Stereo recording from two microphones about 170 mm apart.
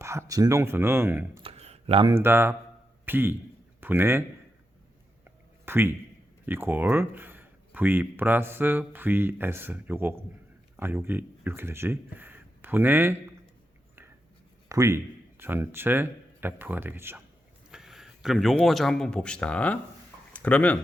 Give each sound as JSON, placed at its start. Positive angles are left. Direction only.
{"t": 0.0, "sound": "speech", "side_deg": -15}
{"t": 1.4, "sound": "a sound", "side_deg": -35}
{"t": 2.0, "sound": "a man's voice", "side_deg": -15}
{"t": 5.2, "sound": "a sound", "side_deg": -15}
{"t": 6.4, "sound": "speech", "side_deg": -10}
{"t": 14.7, "sound": "speech", "side_deg": -20}
{"t": 17.7, "sound": "speech", "side_deg": -5}